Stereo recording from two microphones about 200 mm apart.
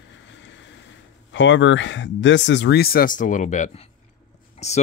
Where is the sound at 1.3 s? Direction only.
65° left (ahead or behind).